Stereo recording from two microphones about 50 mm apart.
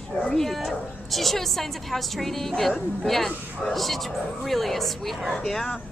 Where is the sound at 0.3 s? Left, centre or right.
Centre.